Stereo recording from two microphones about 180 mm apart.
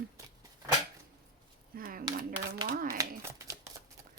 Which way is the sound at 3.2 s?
15° right (ahead or behind).